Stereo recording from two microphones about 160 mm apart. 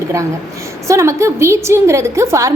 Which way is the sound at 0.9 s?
20° right (ahead or behind).